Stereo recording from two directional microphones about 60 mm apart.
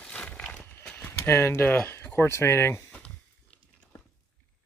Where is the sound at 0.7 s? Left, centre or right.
Left.